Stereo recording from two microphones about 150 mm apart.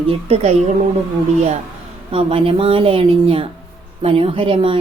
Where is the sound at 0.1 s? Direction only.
40° right (ahead or behind).